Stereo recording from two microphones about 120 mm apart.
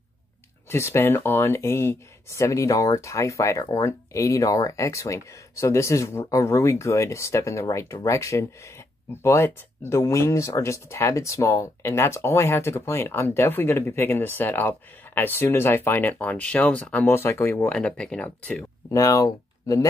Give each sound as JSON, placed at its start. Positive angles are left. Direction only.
{"t": 0.7, "sound": "speech", "side_deg": 20}
{"t": 17.7, "sound": "speech", "side_deg": 5}
{"t": 18.9, "sound": "speech", "side_deg": 30}